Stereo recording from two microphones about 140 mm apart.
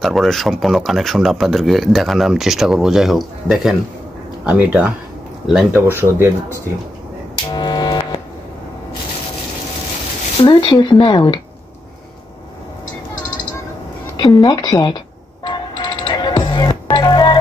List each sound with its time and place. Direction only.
0.0 s speech: centre (ahead or behind); by 6.3 s 15° right (ahead or behind)
7.5 s a sound: 30° left (ahead or behind)
10.4 s speech: 35° left (ahead or behind)
14.1 s speech: 30° left (ahead or behind)
15.4 s music: 35° left (ahead or behind)